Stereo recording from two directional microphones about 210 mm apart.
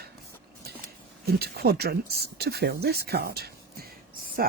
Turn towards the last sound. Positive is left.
turn(degrees=-45)  # may be behind; listen again after turning